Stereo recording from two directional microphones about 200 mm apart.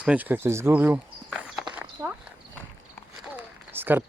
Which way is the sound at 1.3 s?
Centre (ahead or behind).